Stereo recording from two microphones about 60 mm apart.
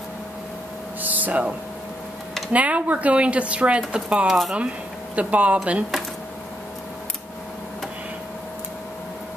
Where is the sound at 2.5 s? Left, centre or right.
Right.